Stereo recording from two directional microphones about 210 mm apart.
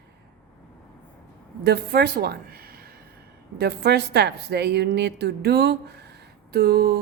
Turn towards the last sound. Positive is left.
turn(degrees=-45)  # may be behind; listen again after turning